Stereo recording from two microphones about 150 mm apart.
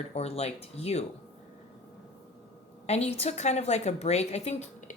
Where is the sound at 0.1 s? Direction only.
45° left (ahead or behind).